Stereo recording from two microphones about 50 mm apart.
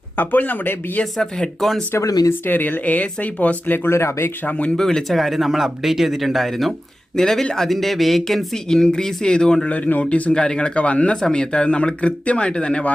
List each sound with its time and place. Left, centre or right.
0.2 s speech: left
1.2 s speech: centre
2.5 s speech: left
3.8 s speech: left
4.4 s speech: left
4.8 s speech: centre
8.7 s speech: centre
9.6 s speech: left